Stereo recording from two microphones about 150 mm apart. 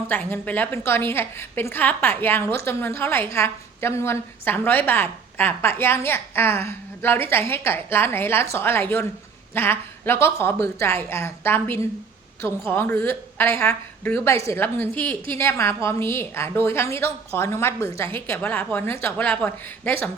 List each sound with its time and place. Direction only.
0.1 s a woman's voice: 10° left (ahead or behind)